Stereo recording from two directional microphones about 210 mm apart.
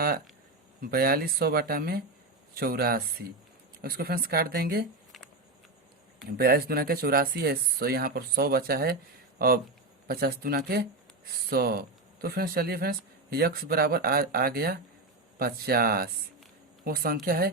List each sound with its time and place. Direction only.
0.8 s speech: 45° right (ahead or behind)
6.3 s speech: 45° right (ahead or behind)
10.1 s speech: 45° right (ahead or behind)